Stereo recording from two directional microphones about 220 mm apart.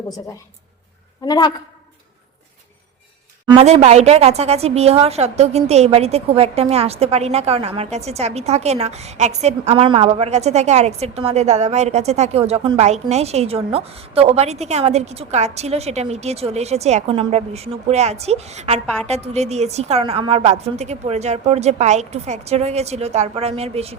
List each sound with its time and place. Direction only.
1.2 s a woman's voice: 20° left (ahead or behind)
3.4 s a woman's voice: 25° right (ahead or behind)